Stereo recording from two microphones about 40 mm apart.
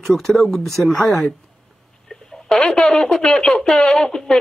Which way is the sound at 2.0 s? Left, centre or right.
Centre.